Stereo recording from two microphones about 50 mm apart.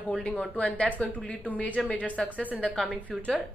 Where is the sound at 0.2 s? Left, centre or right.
Centre.